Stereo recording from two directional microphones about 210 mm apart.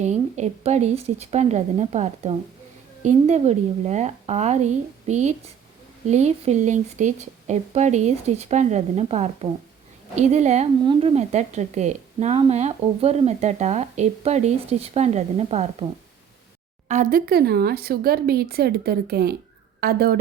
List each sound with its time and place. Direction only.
0.0 s a woman's voice: 35° right (ahead or behind)
16.9 s speech: 40° right (ahead or behind)